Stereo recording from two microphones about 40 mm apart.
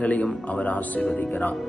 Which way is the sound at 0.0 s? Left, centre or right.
Left.